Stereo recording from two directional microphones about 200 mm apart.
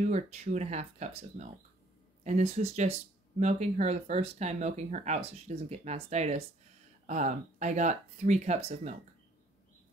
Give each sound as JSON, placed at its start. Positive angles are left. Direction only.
{"t": 0.0, "sound": "speech", "side_deg": -35}